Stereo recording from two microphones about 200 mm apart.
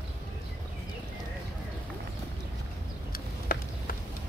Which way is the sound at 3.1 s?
45° left (ahead or behind).